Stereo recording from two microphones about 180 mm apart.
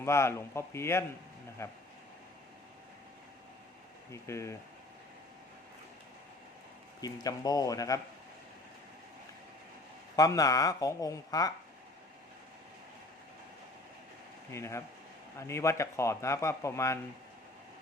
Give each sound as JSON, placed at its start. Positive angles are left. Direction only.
{"t": 0.0, "sound": "speech", "side_deg": 15}
{"t": 4.1, "sound": "speech", "side_deg": 15}
{"t": 7.0, "sound": "speech", "side_deg": 20}
{"t": 10.2, "sound": "speech", "side_deg": 20}
{"t": 14.5, "sound": "speech", "side_deg": 15}